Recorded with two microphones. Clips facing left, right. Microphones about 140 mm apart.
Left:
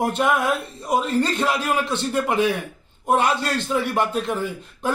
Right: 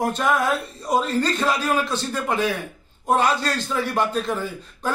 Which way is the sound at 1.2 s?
20° left (ahead or behind).